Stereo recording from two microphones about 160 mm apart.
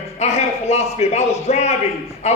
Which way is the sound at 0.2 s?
40° left (ahead or behind).